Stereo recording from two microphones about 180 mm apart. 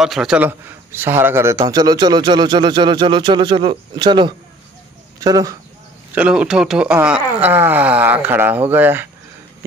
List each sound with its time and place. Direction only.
0.0 s speech: centre (ahead or behind); by 5.6 s 20° right (ahead or behind)
6.1 s speech: 5° right (ahead or behind)